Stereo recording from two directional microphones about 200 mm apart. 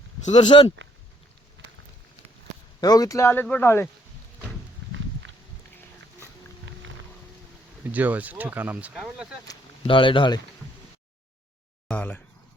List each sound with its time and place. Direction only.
0.3 s speech: 35° left (ahead or behind)
1.6 s run: 70° right (ahead or behind)
2.8 s speech: 20° left (ahead or behind)
7.9 s speech: 10° right (ahead or behind)
9.5 s speech: 25° left (ahead or behind)
11.9 s speech: 10° left (ahead or behind)